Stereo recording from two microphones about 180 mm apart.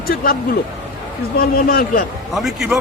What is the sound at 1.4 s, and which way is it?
Speech, 55° left (ahead or behind).